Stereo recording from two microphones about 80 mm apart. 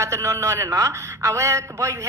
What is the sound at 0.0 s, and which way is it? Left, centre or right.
A man's voice, right.